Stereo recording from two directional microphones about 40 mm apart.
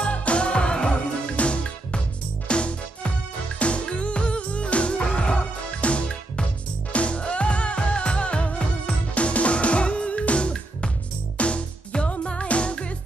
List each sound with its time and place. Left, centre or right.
0.0 s music: left